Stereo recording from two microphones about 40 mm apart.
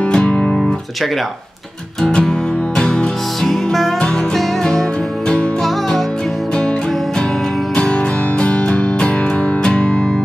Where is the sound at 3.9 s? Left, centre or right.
Centre.